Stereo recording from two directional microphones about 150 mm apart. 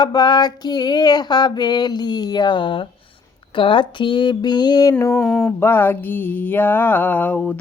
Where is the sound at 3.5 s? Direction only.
35° left (ahead or behind).